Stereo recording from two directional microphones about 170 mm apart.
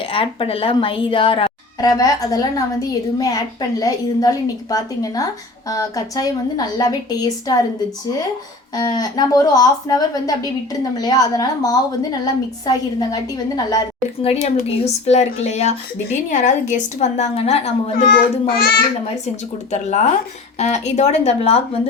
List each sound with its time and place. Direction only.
0.1 s a woman's voice: 30° left (ahead or behind)
8.7 s a woman's voice: 20° left (ahead or behind)
14.4 s a woman's voice: 40° left (ahead or behind)
18.1 s a child's voice: 65° left (ahead or behind)
19.7 s a woman's voice: 45° left (ahead or behind)